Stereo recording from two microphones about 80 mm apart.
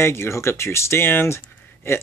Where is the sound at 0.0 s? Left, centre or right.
Left.